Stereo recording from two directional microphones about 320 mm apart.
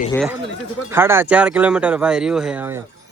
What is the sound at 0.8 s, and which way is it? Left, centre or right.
Speech, centre.